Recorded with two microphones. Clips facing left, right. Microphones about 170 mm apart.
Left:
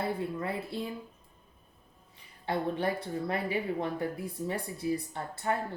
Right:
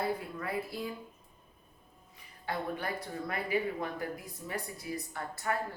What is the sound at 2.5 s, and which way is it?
Speech, 25° left (ahead or behind).